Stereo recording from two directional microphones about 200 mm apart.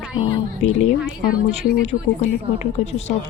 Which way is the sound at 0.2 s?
25° left (ahead or behind).